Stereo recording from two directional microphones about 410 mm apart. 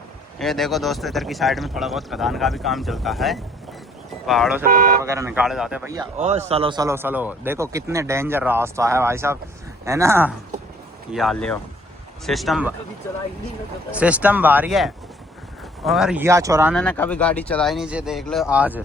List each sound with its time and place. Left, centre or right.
0.3 s speech: centre
4.6 s speech: centre
5.0 s a man's voice: centre